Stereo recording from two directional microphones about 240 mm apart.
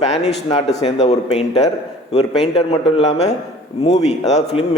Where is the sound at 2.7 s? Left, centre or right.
Left.